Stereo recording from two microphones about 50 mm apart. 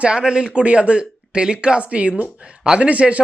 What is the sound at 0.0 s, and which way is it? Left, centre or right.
A man's voice, centre.